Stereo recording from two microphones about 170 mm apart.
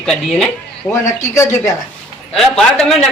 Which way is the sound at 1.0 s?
20° left (ahead or behind).